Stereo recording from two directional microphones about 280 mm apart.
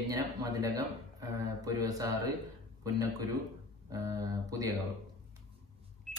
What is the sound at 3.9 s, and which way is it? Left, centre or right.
Speech, centre.